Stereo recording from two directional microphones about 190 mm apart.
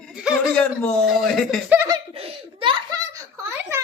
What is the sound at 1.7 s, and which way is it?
Speech, 15° right (ahead or behind).